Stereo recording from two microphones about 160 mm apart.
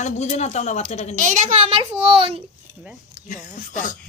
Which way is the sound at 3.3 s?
50° left (ahead or behind).